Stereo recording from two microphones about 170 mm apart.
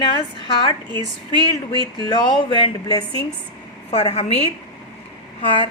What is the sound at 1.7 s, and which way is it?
A woman's voice, 25° left (ahead or behind).